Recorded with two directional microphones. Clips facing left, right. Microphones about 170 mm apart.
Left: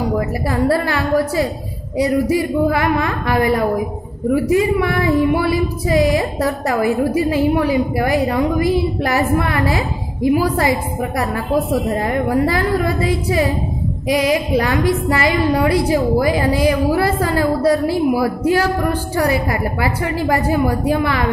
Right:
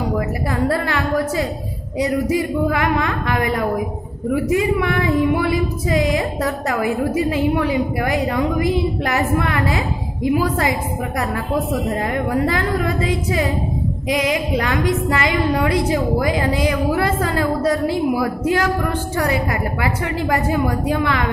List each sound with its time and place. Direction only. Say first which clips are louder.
0.5 s a woman's voice: left 4 dB; 35° left (ahead or behind)